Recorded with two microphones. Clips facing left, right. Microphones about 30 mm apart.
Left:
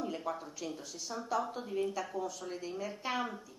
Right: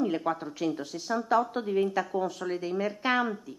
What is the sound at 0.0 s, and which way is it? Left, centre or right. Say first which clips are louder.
Speech: right 9 dB; right.